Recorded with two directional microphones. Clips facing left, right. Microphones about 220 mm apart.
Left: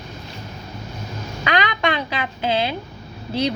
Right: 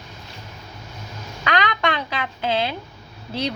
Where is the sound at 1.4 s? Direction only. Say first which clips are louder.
Left 1 dB; 5° left (ahead or behind).